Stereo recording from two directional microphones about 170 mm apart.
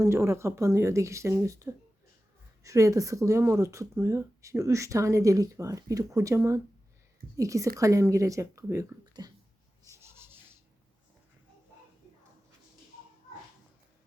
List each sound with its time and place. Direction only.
0.0 s speech: 15° right (ahead or behind)
9.8 s rub: 15° right (ahead or behind)